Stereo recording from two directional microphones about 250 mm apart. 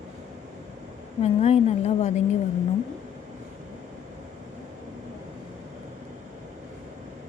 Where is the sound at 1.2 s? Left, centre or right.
Left.